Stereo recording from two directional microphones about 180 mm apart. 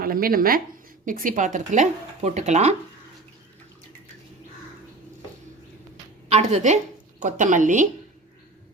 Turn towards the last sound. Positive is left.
turn(degrees=-45)  # may be behind; listen again after turning